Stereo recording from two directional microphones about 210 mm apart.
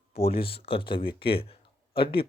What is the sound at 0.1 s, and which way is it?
Speech, 30° left (ahead or behind).